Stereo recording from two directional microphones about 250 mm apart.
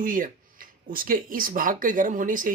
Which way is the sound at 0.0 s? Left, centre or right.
Right.